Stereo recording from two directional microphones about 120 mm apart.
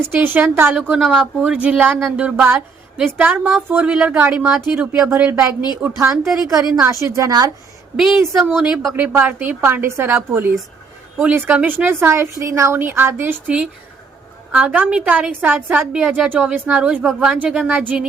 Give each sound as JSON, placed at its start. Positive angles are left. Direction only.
{"t": 0.0, "sound": "speech", "side_deg": -15}
{"t": 0.8, "sound": "speech", "side_deg": -5}
{"t": 1.5, "sound": "speech", "side_deg": -10}
{"t": 7.0, "sound": "a woman's voice", "side_deg": -30}
{"t": 7.9, "sound": "speech", "side_deg": 0}
{"t": 9.0, "sound": "speech", "side_deg": -15}